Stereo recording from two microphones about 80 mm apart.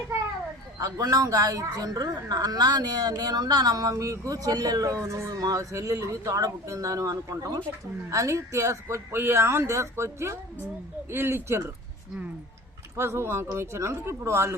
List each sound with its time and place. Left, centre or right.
0.8 s a woman's voice: right
13.0 s a woman's voice: right